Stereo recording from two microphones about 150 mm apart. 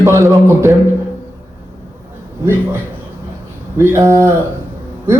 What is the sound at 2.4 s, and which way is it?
Speech, 15° right (ahead or behind).